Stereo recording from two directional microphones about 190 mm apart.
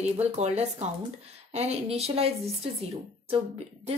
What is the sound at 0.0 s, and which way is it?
A woman's voice, 35° right (ahead or behind).